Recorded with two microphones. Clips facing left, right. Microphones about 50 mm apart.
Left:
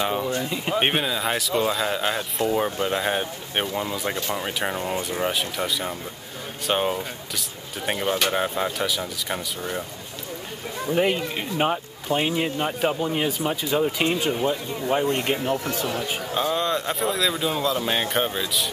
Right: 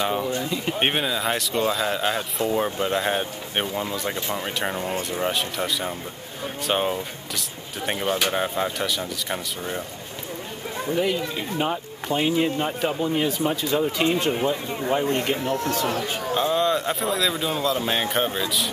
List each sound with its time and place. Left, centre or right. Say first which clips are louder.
0.0 s speech: even; centre
11.0 s speech: left 2 dB; left
11.7 s speech: left 1 dB; centre
15.0 s speech: even; left
15.5 s speech: right 2 dB; centre
15.8 s speech: right 2 dB; right
16.3 s speech: right 2 dB; centre